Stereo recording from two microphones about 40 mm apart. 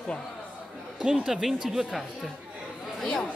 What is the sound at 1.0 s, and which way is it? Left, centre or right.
Speech, centre.